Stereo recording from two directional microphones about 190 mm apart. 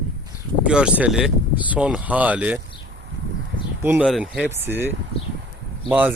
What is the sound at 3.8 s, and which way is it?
Speech, 10° right (ahead or behind).